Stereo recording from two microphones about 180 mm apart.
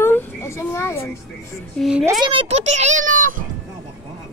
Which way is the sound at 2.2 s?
30° right (ahead or behind).